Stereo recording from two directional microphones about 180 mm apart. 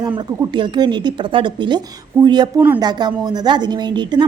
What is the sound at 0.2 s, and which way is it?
A woman's voice, 25° right (ahead or behind).